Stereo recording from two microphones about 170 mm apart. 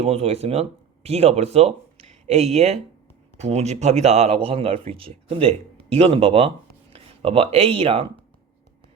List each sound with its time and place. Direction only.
0.0 s a man's voice: 40° right (ahead or behind)